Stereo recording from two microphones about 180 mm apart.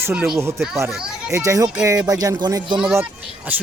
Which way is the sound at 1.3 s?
15° right (ahead or behind).